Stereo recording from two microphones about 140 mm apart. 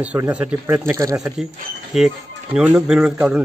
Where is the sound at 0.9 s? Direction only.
25° right (ahead or behind).